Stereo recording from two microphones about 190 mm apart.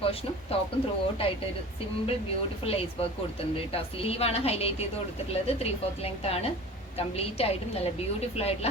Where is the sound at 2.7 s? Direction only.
30° left (ahead or behind).